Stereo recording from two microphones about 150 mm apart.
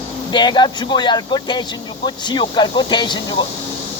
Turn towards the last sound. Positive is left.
turn(degrees=30)  # may be behind; listen again after turning